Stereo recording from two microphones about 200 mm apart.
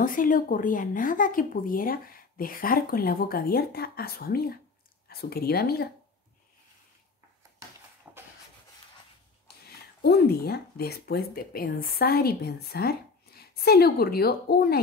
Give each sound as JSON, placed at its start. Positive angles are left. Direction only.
{"t": 0.0, "sound": "speech", "side_deg": 45}
{"t": 8.1, "sound": "rub", "side_deg": -10}
{"t": 10.0, "sound": "speech", "side_deg": 55}